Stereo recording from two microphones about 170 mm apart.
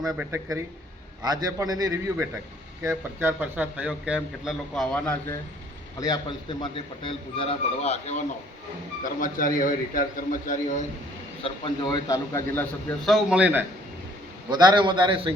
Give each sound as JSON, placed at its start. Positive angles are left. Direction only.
{"t": 0.0, "sound": "speech", "side_deg": 0}
{"t": 0.3, "sound": "a man's voice", "side_deg": -15}
{"t": 6.0, "sound": "a man's voice", "side_deg": 25}
{"t": 9.0, "sound": "a man's voice", "side_deg": 55}
{"t": 11.4, "sound": "a man's voice", "side_deg": 30}
{"t": 13.1, "sound": "a man's voice", "side_deg": -5}
{"t": 14.5, "sound": "a man's voice", "side_deg": -25}